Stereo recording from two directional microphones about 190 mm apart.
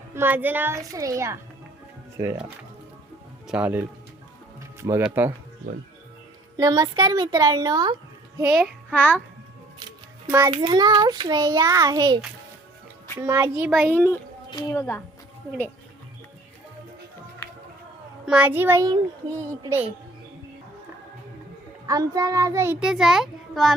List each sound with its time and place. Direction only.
0.1 s a child's voice: 10° right (ahead or behind)
3.4 s a child's voice: 5° right (ahead or behind)
6.6 s a child's voice: 20° right (ahead or behind)
8.6 s a child's voice: 5° left (ahead or behind)
10.3 s a child's voice: 25° right (ahead or behind)
13.2 s a child's voice: 15° right (ahead or behind)
13.9 s a woman's voice: 15° left (ahead or behind)
18.3 s a child's voice: 5° right (ahead or behind)
21.8 s a child's voice: 20° right (ahead or behind); by 23.7 s centre (ahead or behind)